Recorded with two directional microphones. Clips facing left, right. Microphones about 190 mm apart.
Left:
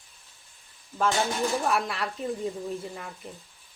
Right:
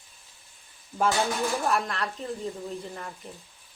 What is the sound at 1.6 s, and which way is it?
Speech, centre (ahead or behind).